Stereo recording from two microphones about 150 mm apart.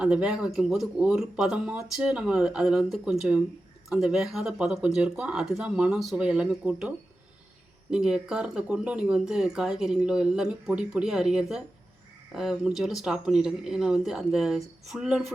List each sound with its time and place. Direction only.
0.0 s speech: 5° right (ahead or behind)